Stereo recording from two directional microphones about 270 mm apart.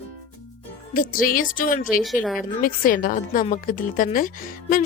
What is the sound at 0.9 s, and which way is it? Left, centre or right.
A woman's voice, left.